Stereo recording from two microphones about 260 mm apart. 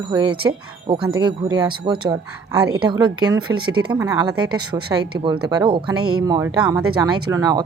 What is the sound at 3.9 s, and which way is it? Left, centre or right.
Speech, centre.